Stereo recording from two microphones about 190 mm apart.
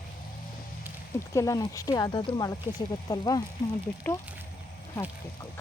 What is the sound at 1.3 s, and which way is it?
Speech, 15° left (ahead or behind).